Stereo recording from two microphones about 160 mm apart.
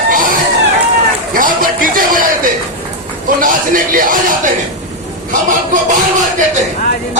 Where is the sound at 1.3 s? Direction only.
60° right (ahead or behind).